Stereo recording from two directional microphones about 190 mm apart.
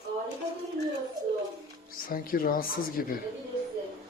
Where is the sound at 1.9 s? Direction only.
50° left (ahead or behind).